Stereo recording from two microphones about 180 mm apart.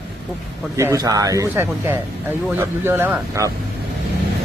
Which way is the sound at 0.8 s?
15° right (ahead or behind).